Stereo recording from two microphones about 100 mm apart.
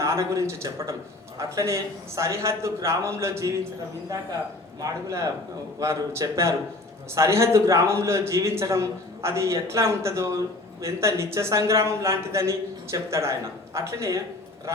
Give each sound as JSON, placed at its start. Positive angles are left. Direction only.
{"t": 0.0, "sound": "a man's voice", "side_deg": -30}
{"t": 4.8, "sound": "a man's voice", "side_deg": -35}